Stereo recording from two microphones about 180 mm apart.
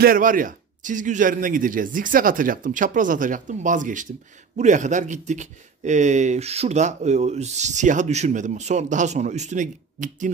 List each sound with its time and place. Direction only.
0.0 s a man's voice: 50° right (ahead or behind)